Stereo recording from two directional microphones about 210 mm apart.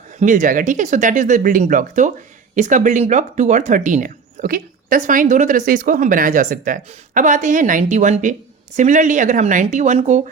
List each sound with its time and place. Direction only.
0.2 s speech: 40° right (ahead or behind)